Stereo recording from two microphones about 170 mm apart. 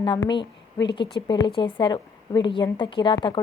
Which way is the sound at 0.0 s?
25° left (ahead or behind).